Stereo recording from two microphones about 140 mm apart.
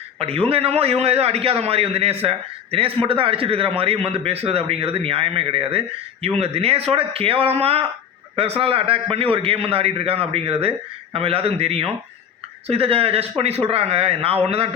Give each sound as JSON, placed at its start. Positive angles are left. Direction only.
{"t": 0.2, "sound": "a man's voice", "side_deg": -45}